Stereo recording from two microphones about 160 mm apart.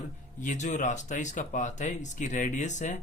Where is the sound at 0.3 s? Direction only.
50° left (ahead or behind).